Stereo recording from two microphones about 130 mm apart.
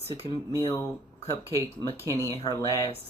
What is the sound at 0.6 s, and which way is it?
Speech, 30° left (ahead or behind).